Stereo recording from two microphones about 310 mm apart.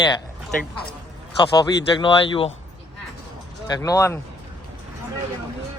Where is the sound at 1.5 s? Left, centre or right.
Centre.